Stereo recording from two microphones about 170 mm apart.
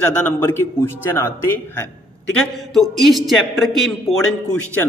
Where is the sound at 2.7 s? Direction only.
Centre (ahead or behind).